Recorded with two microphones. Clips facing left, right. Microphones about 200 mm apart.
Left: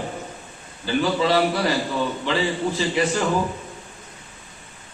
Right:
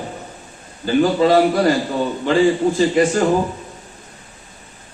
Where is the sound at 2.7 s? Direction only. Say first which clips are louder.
Right 7 dB; 45° right (ahead or behind).